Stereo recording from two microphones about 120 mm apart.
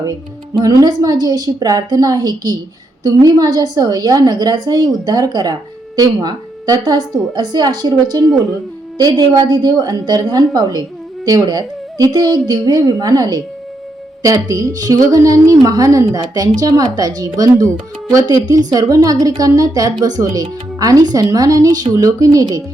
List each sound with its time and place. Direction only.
0.6 s a woman's voice: 30° right (ahead or behind)
14.4 s a woman's voice: 30° right (ahead or behind)